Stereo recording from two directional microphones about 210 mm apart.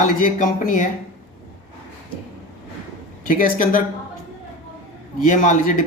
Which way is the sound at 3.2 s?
40° left (ahead or behind).